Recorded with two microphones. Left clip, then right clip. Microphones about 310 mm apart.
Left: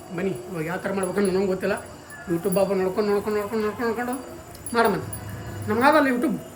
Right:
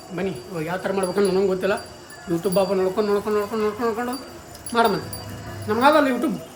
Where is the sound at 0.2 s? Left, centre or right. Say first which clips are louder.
Right 1 dB; centre.